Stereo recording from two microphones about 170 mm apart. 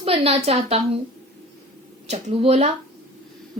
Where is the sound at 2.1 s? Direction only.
35° right (ahead or behind).